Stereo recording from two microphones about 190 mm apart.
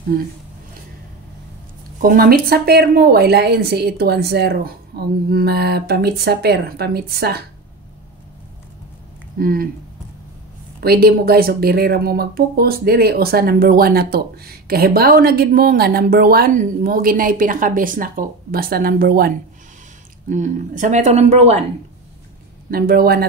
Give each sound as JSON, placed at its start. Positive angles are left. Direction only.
{"t": 2.0, "sound": "a woman's voice", "side_deg": -50}
{"t": 9.4, "sound": "speech", "side_deg": -50}
{"t": 10.8, "sound": "speech", "side_deg": -55}
{"t": 22.7, "sound": "speech", "side_deg": -50}